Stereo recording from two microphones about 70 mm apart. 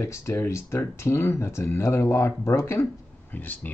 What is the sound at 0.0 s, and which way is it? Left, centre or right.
Speech, left.